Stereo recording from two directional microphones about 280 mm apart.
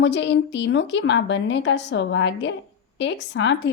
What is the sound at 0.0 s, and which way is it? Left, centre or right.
A woman's voice, left.